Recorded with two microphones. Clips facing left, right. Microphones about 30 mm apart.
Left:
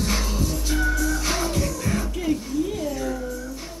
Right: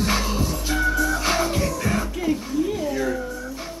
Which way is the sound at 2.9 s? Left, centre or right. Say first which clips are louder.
Right 3 dB; right.